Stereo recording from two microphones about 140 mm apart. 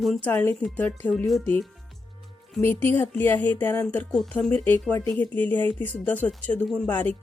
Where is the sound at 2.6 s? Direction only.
15° left (ahead or behind).